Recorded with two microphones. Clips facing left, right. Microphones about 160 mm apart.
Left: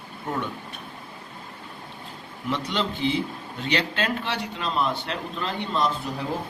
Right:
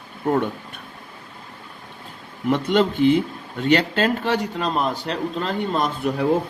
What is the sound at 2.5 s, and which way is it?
A man's voice, 50° right (ahead or behind).